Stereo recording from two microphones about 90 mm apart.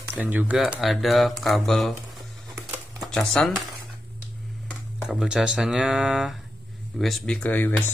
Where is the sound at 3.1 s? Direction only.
5° left (ahead or behind).